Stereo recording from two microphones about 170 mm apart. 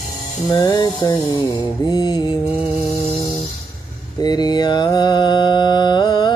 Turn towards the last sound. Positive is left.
turn(degrees=25)  # may be behind; listen again after turning